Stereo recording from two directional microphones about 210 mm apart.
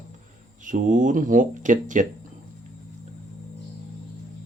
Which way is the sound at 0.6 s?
40° right (ahead or behind).